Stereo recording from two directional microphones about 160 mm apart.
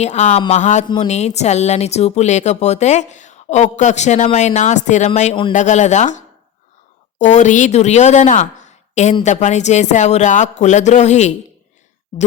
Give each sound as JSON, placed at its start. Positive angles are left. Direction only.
{"t": 0.0, "sound": "speech", "side_deg": 45}